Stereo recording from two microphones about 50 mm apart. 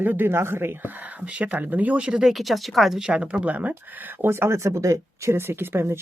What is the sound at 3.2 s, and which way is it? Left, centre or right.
Speech, right.